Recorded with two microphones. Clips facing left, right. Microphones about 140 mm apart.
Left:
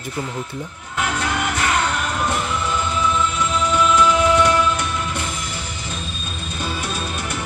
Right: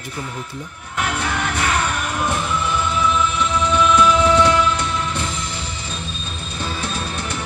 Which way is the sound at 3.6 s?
15° left (ahead or behind).